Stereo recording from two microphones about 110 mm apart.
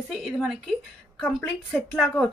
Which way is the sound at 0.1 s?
5° right (ahead or behind).